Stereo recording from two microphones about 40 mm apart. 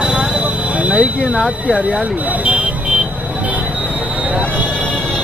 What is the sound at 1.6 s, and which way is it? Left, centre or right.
Vehicle, right.